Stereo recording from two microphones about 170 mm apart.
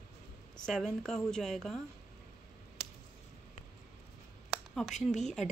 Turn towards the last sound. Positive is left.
turn(degrees=45)  # may be behind; listen again after turning